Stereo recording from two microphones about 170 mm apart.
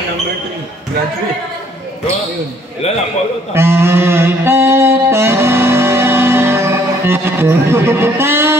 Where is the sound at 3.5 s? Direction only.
15° right (ahead or behind).